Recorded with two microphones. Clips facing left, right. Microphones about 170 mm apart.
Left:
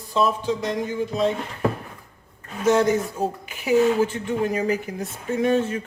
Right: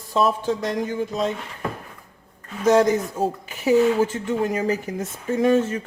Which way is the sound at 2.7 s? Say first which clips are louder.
Right 2 dB; 40° right (ahead or behind).